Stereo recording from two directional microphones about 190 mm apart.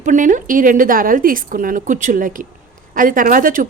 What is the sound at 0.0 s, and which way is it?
A woman's voice, 40° right (ahead or behind).